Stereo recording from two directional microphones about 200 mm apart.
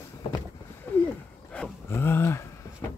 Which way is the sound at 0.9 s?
10° left (ahead or behind).